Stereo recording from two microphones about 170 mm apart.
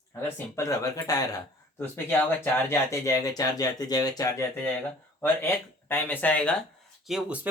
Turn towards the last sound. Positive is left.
turn(degrees=-10)  # may be behind; listen again after turning